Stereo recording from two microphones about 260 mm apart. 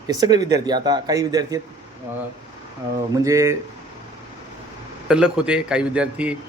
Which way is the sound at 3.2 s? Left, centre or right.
Centre.